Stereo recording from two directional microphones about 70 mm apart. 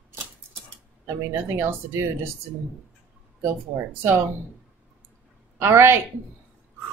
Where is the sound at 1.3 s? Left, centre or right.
Right.